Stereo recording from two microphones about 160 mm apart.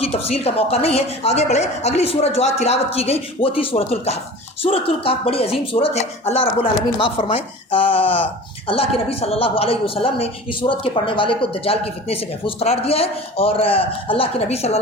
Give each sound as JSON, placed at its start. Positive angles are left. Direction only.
{"t": 0.0, "sound": "a woman's voice", "side_deg": 40}